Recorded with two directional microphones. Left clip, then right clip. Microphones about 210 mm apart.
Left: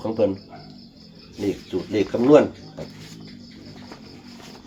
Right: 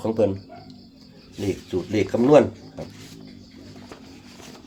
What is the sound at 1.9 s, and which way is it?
Speech, 45° right (ahead or behind).